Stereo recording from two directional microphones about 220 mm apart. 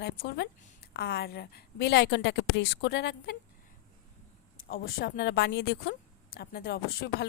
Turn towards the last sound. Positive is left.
turn(degrees=45)  # may be behind; listen again after turning